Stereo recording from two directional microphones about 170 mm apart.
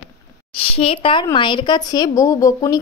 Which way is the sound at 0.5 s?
35° left (ahead or behind).